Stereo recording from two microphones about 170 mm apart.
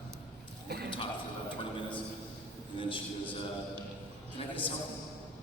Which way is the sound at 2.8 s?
30° left (ahead or behind).